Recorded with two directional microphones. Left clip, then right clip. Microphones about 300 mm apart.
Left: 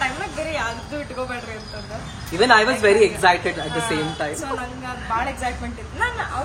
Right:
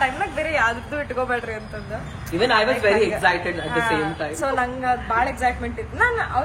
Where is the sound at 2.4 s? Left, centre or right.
Left.